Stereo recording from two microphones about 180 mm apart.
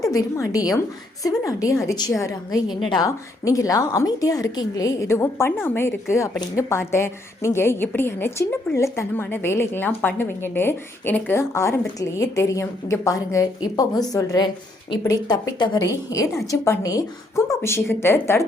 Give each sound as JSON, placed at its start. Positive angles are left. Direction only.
{"t": 0.1, "sound": "a woman's voice", "side_deg": 20}